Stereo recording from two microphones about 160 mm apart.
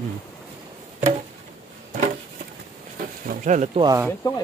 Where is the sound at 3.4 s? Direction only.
50° right (ahead or behind).